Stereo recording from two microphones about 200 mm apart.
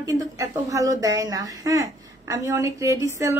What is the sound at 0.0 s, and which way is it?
A woman's voice, 15° right (ahead or behind).